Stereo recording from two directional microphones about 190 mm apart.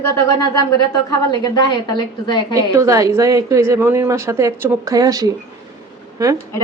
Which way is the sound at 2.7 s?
15° right (ahead or behind).